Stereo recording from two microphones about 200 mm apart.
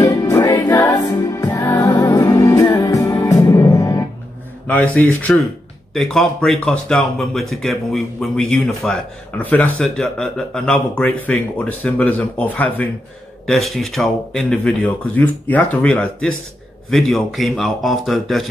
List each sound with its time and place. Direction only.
0.0 s music: 15° left (ahead or behind)
4.6 s speech: 5° left (ahead or behind)